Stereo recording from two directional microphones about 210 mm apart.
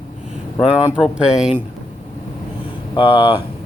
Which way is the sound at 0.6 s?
5° right (ahead or behind).